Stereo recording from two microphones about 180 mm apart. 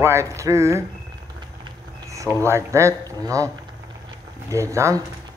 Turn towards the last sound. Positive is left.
turn(degrees=-15)  # may be behind; listen again after turning